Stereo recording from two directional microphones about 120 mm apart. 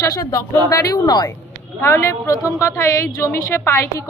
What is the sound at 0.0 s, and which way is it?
A woman's voice, 30° left (ahead or behind).